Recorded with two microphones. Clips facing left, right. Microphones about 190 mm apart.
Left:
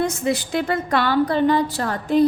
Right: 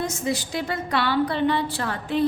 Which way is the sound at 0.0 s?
60° left (ahead or behind).